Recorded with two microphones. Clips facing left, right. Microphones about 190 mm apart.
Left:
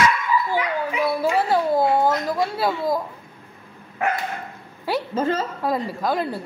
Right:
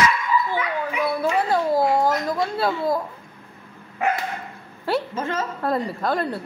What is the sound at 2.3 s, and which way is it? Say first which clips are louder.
Speech: even; centre (ahead or behind).